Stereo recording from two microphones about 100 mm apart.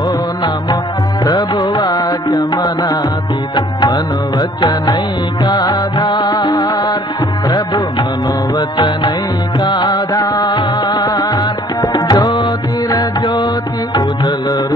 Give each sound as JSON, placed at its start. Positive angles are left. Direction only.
{"t": 1.2, "sound": "music", "side_deg": 40}